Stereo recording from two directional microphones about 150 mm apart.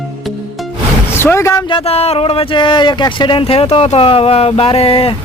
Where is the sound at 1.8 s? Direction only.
40° left (ahead or behind).